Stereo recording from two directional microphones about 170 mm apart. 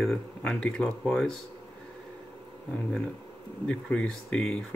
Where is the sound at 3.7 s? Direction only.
5° left (ahead or behind).